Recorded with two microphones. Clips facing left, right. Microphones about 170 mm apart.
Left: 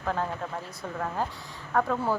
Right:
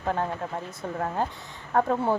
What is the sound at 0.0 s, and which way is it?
A woman's voice, 20° right (ahead or behind).